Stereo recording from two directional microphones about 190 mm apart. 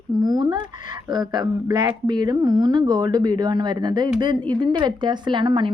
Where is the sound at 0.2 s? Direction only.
20° right (ahead or behind).